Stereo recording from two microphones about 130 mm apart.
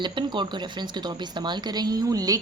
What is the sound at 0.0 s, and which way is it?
Speech, 35° right (ahead or behind).